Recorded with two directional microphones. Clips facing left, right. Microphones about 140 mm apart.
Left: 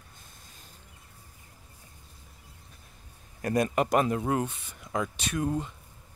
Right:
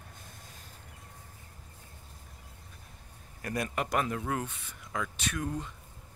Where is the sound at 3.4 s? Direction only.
30° left (ahead or behind).